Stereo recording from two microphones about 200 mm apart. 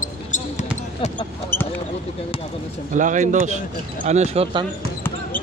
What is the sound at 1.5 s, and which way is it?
Speech, 10° left (ahead or behind).